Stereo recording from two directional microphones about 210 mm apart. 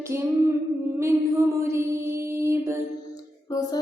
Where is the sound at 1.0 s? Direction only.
15° right (ahead or behind).